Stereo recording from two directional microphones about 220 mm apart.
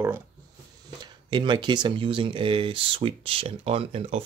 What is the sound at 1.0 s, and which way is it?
Speech, 20° right (ahead or behind).